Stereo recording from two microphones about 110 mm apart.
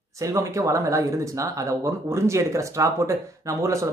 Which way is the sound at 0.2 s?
30° right (ahead or behind).